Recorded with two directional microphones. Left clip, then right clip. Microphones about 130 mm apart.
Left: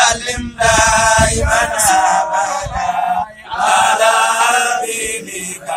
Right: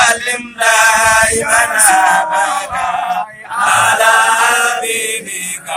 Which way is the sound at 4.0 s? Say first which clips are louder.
Right 2 dB; 10° right (ahead or behind).